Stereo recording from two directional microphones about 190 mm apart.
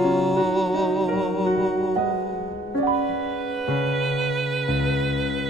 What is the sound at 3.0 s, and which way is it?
Music, centre (ahead or behind).